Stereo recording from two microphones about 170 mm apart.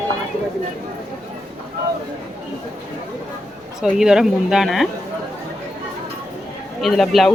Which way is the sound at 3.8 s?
5° right (ahead or behind).